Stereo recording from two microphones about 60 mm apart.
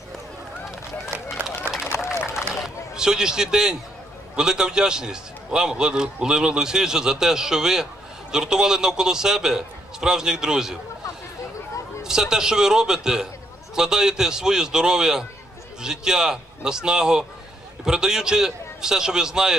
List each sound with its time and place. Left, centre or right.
1.7 s run: centre
2.1 s run: left
2.6 s a man's voice: centre
12.0 s a man's voice: centre